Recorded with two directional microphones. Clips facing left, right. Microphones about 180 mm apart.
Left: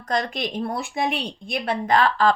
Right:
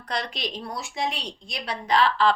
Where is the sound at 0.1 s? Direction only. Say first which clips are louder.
Left 6 dB; 50° left (ahead or behind).